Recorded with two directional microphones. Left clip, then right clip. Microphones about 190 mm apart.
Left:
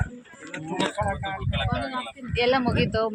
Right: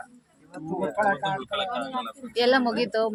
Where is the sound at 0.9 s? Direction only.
55° right (ahead or behind).